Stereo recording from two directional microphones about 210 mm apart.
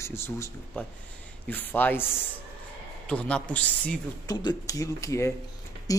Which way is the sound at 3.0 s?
5° left (ahead or behind).